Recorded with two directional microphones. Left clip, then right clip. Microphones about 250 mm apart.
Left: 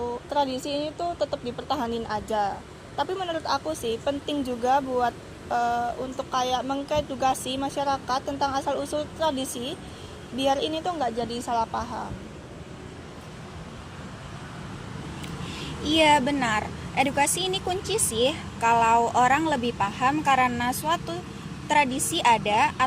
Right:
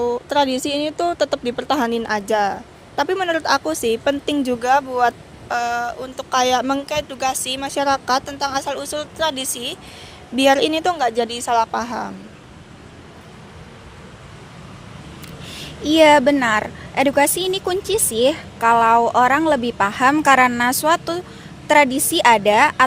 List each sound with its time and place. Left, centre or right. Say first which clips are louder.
0.0 s a woman's voice: right 8 dB; right
15.5 s a woman's voice: right 8 dB; right